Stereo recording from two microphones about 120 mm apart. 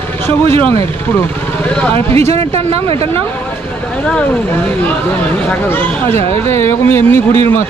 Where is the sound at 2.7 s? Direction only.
55° right (ahead or behind).